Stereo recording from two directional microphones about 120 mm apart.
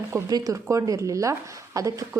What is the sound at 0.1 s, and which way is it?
A woman's voice, 30° right (ahead or behind).